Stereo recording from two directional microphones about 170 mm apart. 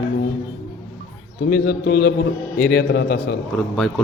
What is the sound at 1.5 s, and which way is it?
A man's voice, 65° left (ahead or behind).